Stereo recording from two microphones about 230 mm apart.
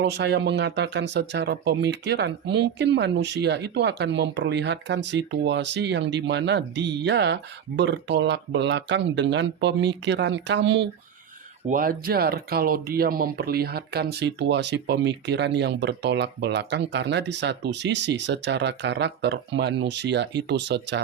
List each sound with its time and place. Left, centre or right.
0.0 s speech: right
11.7 s speech: right